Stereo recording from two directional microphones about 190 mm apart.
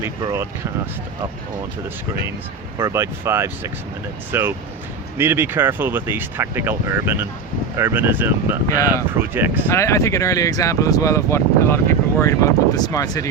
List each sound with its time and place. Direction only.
0.0 s speech: 15° right (ahead or behind)
2.7 s speech: 15° right (ahead or behind)
8.6 s speech: 15° left (ahead or behind)
9.1 s speech: 10° right (ahead or behind)
9.6 s speech: 15° left (ahead or behind)